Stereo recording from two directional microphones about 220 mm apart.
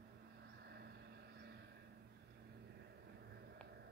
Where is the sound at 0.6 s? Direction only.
45° right (ahead or behind).